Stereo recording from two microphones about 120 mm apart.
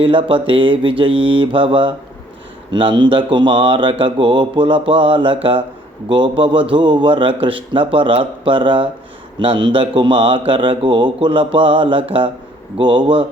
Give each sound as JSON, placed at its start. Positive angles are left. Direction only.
{"t": 0.0, "sound": "a man's voice", "side_deg": -45}